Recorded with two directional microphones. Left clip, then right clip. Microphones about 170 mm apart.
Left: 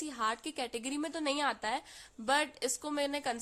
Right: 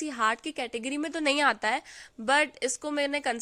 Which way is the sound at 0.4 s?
15° right (ahead or behind).